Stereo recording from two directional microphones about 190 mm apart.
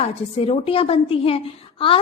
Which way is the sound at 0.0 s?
30° left (ahead or behind).